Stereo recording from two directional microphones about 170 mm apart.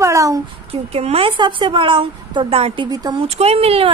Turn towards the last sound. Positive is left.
turn(degrees=-35)  # may be behind; listen again after turning